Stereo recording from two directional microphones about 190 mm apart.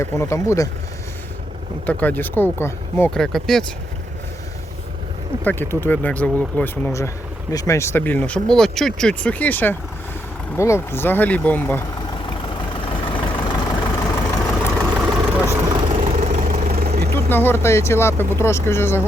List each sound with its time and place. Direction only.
0.0 s speech: 15° left (ahead or behind)
1.9 s speech: 10° left (ahead or behind)
5.4 s speech: 10° left (ahead or behind)
12.8 s vehicle: 25° left (ahead or behind)
14.0 s vehicle: 5° left (ahead or behind)
15.0 s vehicle: 10° right (ahead or behind)
16.5 s vehicle: 50° right (ahead or behind)
17.2 s speech: 10° left (ahead or behind)